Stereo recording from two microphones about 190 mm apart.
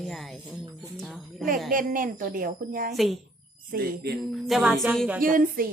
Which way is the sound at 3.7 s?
55° right (ahead or behind).